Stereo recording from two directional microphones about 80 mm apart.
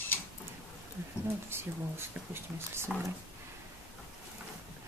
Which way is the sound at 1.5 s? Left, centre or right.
Right.